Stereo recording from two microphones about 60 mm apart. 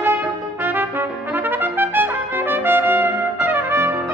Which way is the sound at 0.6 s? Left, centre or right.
Right.